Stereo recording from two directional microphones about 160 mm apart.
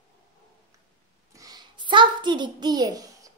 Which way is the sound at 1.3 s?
25° right (ahead or behind).